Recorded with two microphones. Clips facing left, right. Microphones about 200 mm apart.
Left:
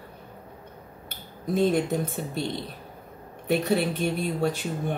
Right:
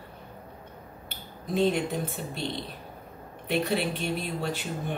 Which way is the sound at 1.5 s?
45° left (ahead or behind).